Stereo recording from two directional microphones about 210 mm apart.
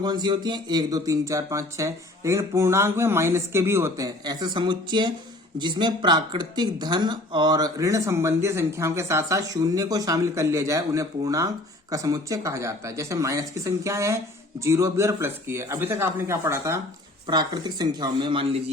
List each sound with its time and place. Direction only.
0.0 s speech: 20° right (ahead or behind)